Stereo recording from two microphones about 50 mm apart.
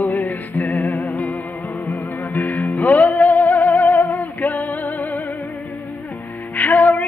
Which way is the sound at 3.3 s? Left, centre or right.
Left.